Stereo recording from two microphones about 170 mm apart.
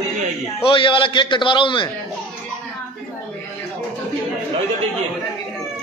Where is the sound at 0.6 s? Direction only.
30° left (ahead or behind).